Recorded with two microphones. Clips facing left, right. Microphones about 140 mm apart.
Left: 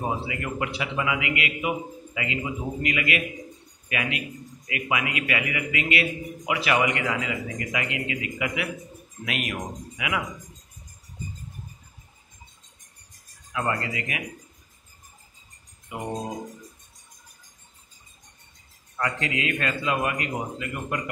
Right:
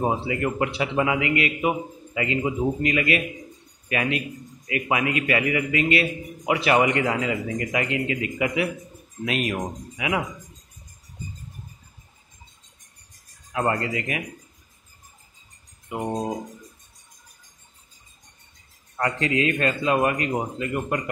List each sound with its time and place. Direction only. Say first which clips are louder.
0.0 s a man's voice: right 5 dB; 35° right (ahead or behind)
13.5 s a man's voice: right 4 dB; 35° right (ahead or behind)
18.9 s a man's voice: right 5 dB; 35° right (ahead or behind)